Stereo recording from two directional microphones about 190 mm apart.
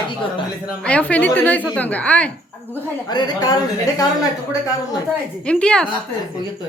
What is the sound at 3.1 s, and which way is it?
Speech, 20° left (ahead or behind).